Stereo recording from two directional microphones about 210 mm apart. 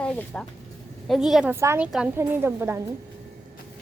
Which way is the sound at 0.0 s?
5° left (ahead or behind).